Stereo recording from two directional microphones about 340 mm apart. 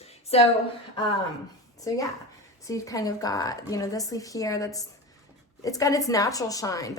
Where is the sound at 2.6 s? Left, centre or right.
Centre.